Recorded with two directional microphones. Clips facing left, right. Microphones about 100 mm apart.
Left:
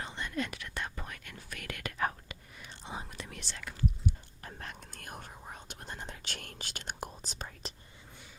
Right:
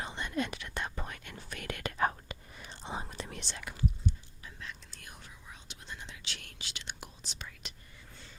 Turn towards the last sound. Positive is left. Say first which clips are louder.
# left 4 dB
turn(degrees=40)  # may be behind; listen again after turning